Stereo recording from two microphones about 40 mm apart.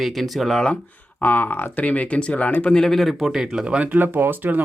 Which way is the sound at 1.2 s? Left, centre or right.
Left.